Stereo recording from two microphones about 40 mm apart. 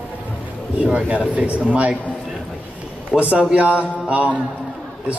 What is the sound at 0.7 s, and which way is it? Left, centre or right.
A man's voice, right.